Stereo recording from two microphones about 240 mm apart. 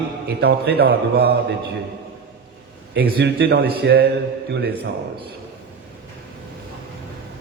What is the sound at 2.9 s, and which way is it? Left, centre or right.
A man's voice, right.